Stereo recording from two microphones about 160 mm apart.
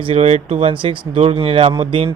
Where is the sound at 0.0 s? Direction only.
40° right (ahead or behind).